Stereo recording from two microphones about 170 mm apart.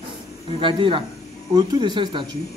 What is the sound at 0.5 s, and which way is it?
Speech, 30° right (ahead or behind).